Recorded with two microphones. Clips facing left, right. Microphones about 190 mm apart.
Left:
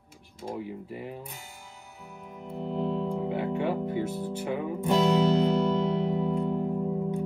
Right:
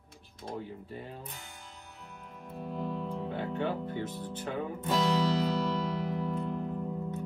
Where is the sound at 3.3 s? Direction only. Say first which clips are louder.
Left 3 dB; 10° left (ahead or behind).